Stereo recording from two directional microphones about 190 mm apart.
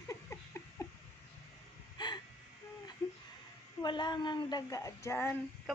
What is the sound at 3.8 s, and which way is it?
A woman's voice, 25° left (ahead or behind).